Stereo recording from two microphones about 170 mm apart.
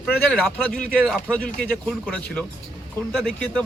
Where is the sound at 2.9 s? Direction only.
5° left (ahead or behind).